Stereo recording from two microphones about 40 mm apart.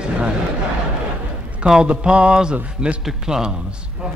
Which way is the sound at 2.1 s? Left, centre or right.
Right.